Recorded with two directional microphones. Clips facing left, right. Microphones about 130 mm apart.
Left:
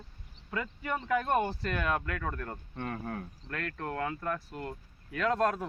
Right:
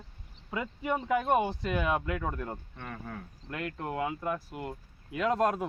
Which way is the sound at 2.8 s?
45° left (ahead or behind).